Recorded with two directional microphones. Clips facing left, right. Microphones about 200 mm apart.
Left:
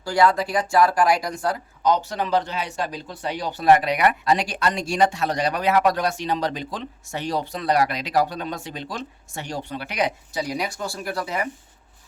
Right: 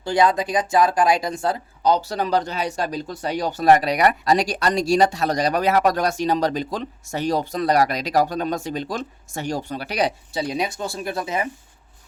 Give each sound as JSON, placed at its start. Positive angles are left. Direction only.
{"t": 0.0, "sound": "speech", "side_deg": -20}